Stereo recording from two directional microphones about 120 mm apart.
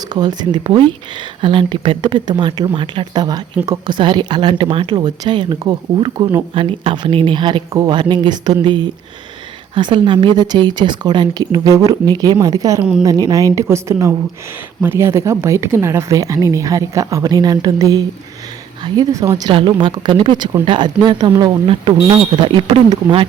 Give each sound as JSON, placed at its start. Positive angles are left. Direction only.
{"t": 0.0, "sound": "speech", "side_deg": -35}
{"t": 19.5, "sound": "speech", "side_deg": -45}